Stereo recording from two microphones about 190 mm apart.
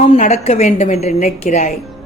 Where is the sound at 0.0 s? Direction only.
35° left (ahead or behind).